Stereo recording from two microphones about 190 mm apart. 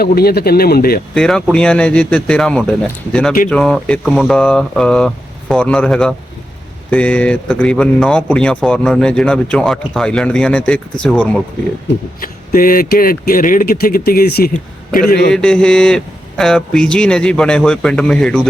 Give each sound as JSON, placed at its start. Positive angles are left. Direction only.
{"t": 0.0, "sound": "speech", "side_deg": 55}
{"t": 1.1, "sound": "a man's voice", "side_deg": 5}
{"t": 12.2, "sound": "speech", "side_deg": 50}
{"t": 15.3, "sound": "a man's voice", "side_deg": 5}